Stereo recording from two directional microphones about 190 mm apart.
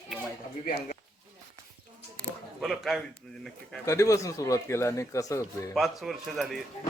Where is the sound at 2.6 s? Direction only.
Centre (ahead or behind).